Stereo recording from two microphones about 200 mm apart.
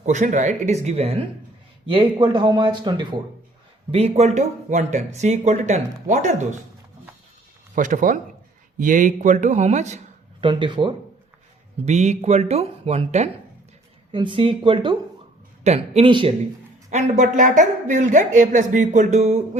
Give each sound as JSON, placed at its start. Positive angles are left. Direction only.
{"t": 0.0, "sound": "speech", "side_deg": -40}
{"t": 7.8, "sound": "speech", "side_deg": -40}
{"t": 10.4, "sound": "speech", "side_deg": -25}
{"t": 16.9, "sound": "speech", "side_deg": -35}